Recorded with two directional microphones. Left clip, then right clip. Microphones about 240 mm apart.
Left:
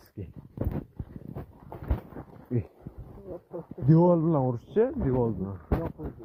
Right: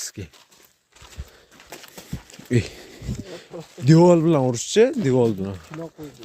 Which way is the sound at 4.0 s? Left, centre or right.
Right.